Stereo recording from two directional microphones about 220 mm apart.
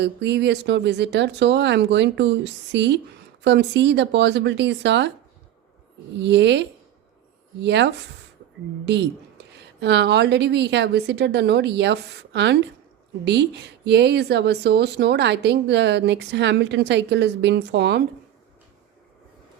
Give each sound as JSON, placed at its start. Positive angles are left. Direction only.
{"t": 0.0, "sound": "speech", "side_deg": -50}
{"t": 6.1, "sound": "speech", "side_deg": -55}